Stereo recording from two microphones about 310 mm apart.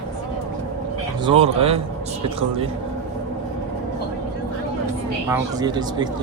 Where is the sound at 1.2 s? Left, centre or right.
Centre.